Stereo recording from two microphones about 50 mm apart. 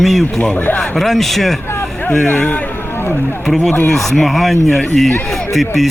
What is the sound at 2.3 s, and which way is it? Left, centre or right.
Speech, left.